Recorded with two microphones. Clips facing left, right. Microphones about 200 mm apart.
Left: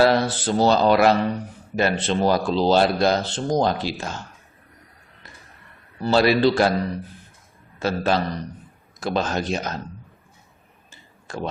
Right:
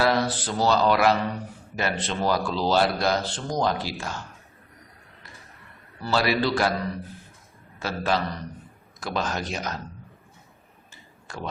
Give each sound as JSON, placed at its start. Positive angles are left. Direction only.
{"t": 0.0, "sound": "a man's voice", "side_deg": 30}
{"t": 6.0, "sound": "a man's voice", "side_deg": 25}
{"t": 7.8, "sound": "a man's voice", "side_deg": 25}
{"t": 11.3, "sound": "speech", "side_deg": 25}